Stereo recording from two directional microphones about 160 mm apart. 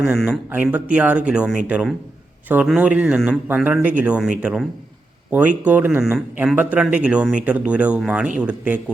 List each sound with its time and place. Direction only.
0.2 s speech: 10° right (ahead or behind)